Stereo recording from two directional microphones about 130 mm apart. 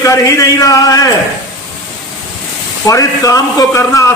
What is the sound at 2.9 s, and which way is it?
A man's voice, 25° left (ahead or behind).